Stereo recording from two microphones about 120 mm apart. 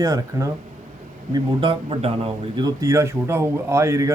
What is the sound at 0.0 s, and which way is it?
Speech, 30° right (ahead or behind).